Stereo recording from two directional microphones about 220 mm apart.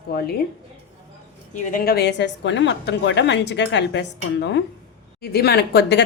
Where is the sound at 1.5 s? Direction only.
40° left (ahead or behind).